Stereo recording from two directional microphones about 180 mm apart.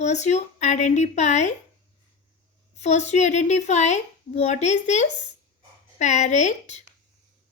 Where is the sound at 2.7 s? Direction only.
40° left (ahead or behind).